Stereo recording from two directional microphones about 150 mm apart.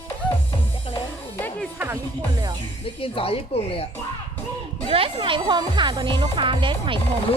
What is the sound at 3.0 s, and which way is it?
Speech, 40° left (ahead or behind).